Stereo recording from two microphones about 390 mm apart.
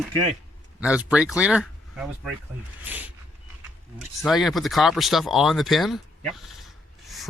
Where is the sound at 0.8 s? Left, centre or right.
Centre.